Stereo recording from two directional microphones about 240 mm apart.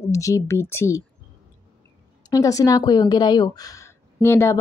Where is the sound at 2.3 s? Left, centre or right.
Centre.